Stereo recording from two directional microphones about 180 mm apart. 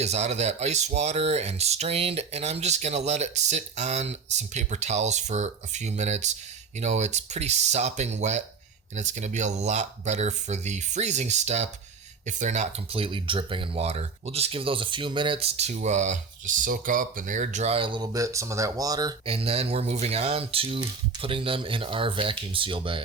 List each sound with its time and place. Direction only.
0.0 s speech: 35° right (ahead or behind)